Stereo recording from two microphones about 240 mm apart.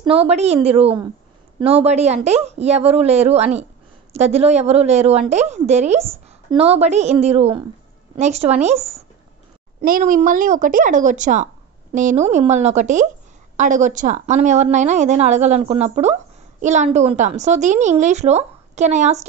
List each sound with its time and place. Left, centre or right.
0.0 s a woman's voice: right